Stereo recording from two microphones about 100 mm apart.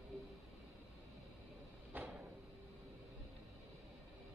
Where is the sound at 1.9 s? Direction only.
20° right (ahead or behind).